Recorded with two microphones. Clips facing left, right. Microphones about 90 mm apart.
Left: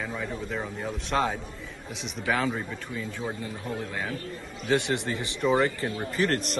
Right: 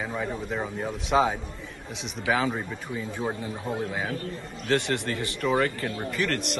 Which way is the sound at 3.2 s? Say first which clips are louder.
Right 3 dB; 25° right (ahead or behind).